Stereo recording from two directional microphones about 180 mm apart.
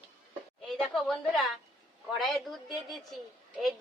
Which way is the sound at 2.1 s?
Centre (ahead or behind).